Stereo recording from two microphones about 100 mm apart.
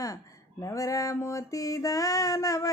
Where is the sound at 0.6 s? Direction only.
35° left (ahead or behind).